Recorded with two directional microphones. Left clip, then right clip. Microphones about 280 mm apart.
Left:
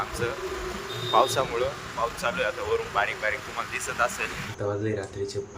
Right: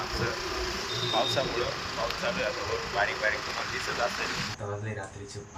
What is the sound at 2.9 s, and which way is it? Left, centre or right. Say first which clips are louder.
Speech: right 2 dB; centre.